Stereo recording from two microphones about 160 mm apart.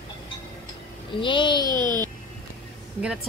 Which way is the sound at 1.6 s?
25° right (ahead or behind).